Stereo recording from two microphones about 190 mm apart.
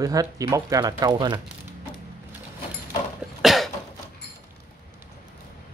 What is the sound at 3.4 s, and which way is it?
Cough, centre (ahead or behind).